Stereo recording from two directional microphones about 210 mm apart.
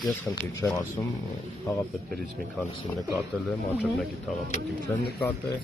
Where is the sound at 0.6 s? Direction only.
5° left (ahead or behind).